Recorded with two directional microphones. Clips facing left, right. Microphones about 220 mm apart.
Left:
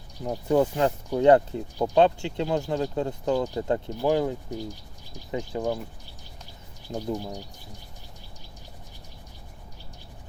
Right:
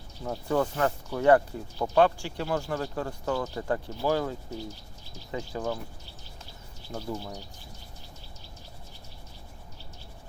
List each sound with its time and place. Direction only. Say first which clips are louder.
0.2 s speech: left 5 dB; 20° left (ahead or behind)
6.9 s speech: left 5 dB; 15° left (ahead or behind)